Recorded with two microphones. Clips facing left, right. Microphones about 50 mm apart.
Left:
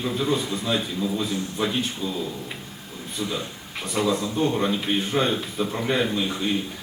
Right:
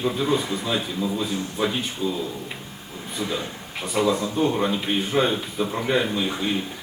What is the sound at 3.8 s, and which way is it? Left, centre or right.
A man's voice, centre.